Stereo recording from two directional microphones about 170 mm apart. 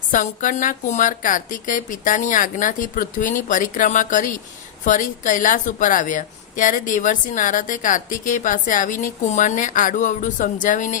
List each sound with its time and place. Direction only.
0.1 s speech: 50° left (ahead or behind)